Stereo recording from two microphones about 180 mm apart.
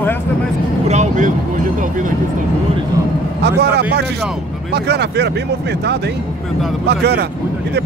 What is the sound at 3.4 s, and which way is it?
Speech, 65° right (ahead or behind).